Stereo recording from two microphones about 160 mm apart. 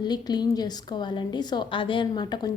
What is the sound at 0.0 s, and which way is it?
A woman's voice, 25° left (ahead or behind).